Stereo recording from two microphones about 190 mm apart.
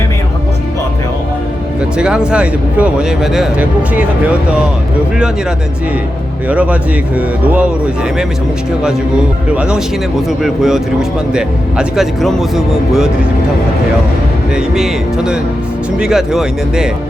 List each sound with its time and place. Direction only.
2.0 s speech: 5° right (ahead or behind)
6.5 s speech: 5° right (ahead or behind)
9.6 s speech: 5° right (ahead or behind)
14.5 s speech: 5° right (ahead or behind)